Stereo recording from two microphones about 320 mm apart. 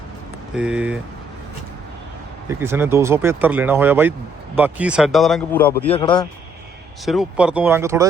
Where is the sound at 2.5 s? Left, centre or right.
Centre.